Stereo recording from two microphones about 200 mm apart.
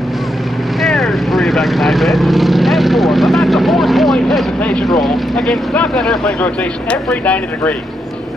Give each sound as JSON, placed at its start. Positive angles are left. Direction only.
{"t": 0.7, "sound": "vehicle", "side_deg": 0}